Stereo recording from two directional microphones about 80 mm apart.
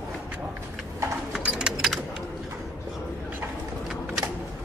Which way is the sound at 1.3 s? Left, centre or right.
Centre.